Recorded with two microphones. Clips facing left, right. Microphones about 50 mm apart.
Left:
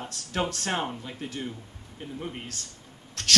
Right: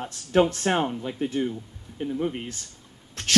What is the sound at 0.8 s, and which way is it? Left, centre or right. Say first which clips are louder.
Speech: right 7 dB; centre.